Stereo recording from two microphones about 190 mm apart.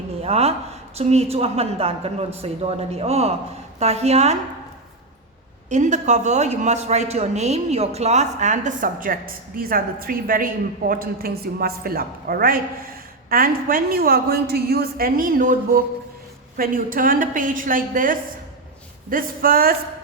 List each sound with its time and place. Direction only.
0.2 s speech: 35° right (ahead or behind)
5.6 s a woman's voice: 40° right (ahead or behind)